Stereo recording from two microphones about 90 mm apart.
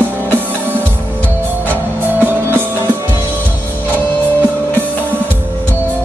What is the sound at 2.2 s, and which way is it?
Music, 20° right (ahead or behind).